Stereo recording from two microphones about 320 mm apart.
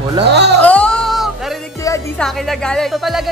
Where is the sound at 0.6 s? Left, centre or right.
Centre.